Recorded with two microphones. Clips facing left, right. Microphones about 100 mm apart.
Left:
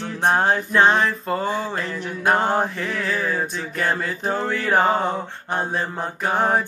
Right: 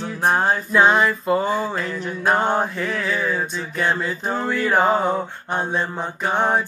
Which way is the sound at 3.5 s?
55° left (ahead or behind).